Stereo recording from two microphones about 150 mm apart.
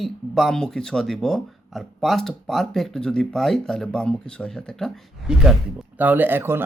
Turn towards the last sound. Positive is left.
turn(degrees=-15)  # may be behind; listen again after turning